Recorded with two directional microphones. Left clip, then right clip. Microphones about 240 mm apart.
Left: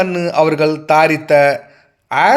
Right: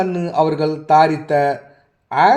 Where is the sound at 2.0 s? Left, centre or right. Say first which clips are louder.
Left 1 dB; left.